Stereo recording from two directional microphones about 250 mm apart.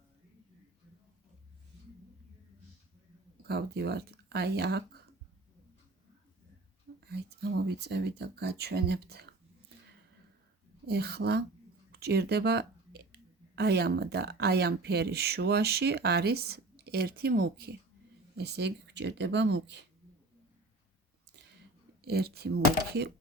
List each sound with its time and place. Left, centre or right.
3.4 s speech: right
7.0 s speech: right
10.8 s speech: right
11.9 s a sound: right
13.6 s speech: right
22.0 s speech: right